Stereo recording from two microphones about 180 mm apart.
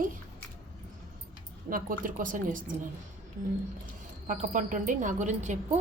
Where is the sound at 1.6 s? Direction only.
50° right (ahead or behind).